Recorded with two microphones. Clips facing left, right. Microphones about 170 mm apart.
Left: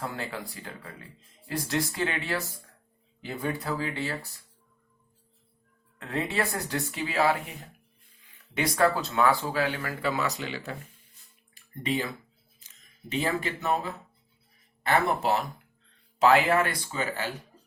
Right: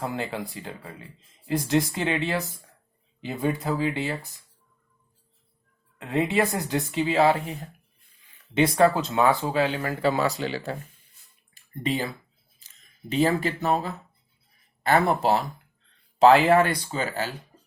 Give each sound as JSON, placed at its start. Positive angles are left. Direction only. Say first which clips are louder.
{"t": 0.0, "sound": "speech", "louder": "right 5 dB", "side_deg": -20}
{"t": 6.0, "sound": "speech", "louder": "right 6 dB", "side_deg": -20}
{"t": 8.5, "sound": "speech", "louder": "right 5 dB", "side_deg": -20}
{"t": 11.9, "sound": "speech", "louder": "right 2 dB", "side_deg": -35}
{"t": 14.8, "sound": "speech", "louder": "right 4 dB", "side_deg": -30}